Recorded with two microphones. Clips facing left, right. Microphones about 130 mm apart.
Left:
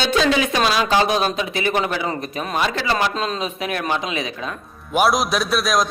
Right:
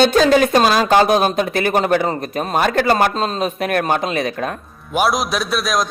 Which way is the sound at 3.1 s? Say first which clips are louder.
Right 4 dB; 40° right (ahead or behind).